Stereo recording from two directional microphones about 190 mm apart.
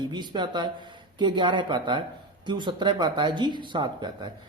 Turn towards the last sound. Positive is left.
turn(degrees=-25)  # may be behind; listen again after turning